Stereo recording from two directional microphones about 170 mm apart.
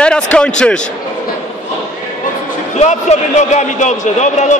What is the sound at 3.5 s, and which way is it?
Speech, 45° left (ahead or behind).